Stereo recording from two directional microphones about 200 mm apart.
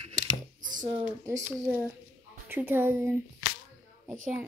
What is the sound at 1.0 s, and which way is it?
Speech, 10° right (ahead or behind).